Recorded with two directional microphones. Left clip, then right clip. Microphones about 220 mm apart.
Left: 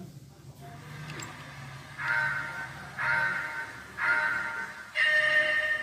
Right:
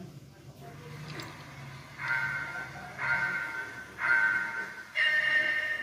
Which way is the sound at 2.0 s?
20° left (ahead or behind).